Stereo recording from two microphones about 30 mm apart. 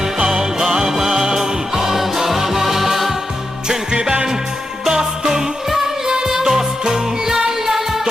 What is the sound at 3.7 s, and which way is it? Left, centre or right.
Music, right.